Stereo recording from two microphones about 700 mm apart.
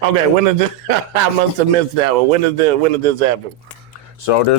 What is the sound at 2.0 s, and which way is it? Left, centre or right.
Speech, right.